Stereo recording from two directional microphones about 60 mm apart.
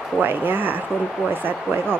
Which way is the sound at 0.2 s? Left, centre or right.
Right.